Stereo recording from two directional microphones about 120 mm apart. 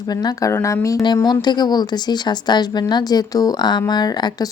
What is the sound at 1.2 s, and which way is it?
Speech, 35° left (ahead or behind).